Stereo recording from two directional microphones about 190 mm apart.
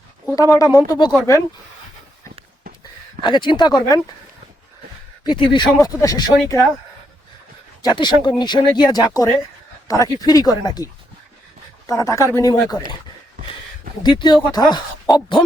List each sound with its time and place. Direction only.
0.5 s speech: 20° left (ahead or behind)
3.2 s speech: 25° left (ahead or behind)
5.2 s speech: 25° left (ahead or behind)
7.8 s speech: 20° left (ahead or behind)
11.9 s speech: 15° left (ahead or behind)
14.0 s speech: 25° left (ahead or behind)